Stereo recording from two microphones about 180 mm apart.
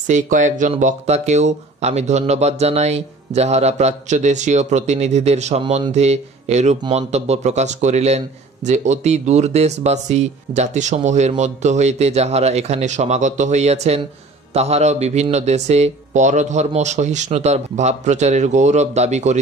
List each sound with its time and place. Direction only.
0.0 s speech: 45° right (ahead or behind)